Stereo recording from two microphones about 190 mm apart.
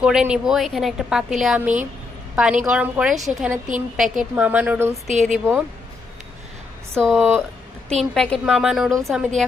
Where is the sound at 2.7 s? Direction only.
5° right (ahead or behind).